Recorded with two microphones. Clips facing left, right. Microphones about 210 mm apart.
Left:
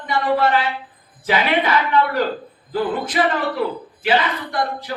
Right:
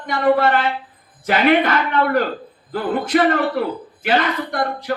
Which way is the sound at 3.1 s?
50° right (ahead or behind).